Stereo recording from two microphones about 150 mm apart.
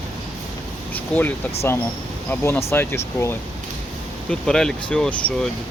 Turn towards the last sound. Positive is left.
turn(degrees=5)  # may be behind; listen again after turning